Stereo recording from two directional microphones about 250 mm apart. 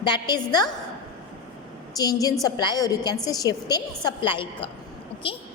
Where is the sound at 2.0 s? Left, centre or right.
Centre.